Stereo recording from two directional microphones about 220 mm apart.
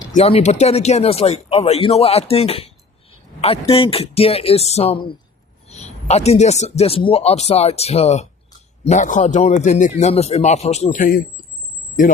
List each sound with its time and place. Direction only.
0.1 s a man's voice: 30° left (ahead or behind)